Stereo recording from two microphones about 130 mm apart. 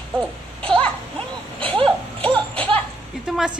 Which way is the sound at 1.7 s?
45° right (ahead or behind).